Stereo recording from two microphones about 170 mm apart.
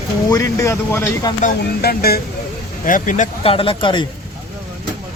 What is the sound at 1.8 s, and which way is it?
Speech, 65° left (ahead or behind).